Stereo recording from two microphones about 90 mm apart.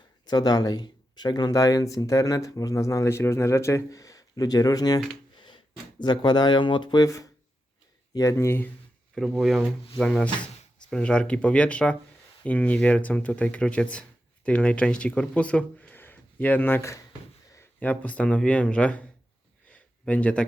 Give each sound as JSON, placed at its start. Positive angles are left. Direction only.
{"t": 0.3, "sound": "speech", "side_deg": 50}
{"t": 6.0, "sound": "speech", "side_deg": 55}
{"t": 8.1, "sound": "speech", "side_deg": 35}
{"t": 9.1, "sound": "speech", "side_deg": 0}
{"t": 10.0, "sound": "speech", "side_deg": 10}
{"t": 19.6, "sound": "a sound", "side_deg": 15}